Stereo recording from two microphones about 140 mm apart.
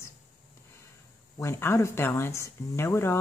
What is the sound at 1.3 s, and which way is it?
Speech, 20° left (ahead or behind).